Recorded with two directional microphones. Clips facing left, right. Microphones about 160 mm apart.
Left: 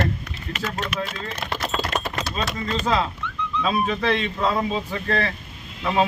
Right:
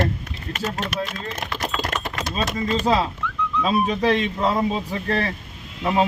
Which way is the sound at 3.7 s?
10° right (ahead or behind).